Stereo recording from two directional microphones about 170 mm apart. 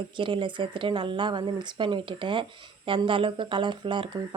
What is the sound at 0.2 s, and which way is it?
A woman's voice, 30° right (ahead or behind).